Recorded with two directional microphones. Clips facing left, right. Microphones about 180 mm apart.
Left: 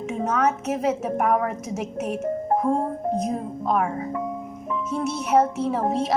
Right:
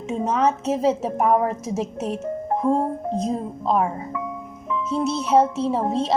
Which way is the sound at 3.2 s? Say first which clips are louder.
Right 2 dB; 25° right (ahead or behind).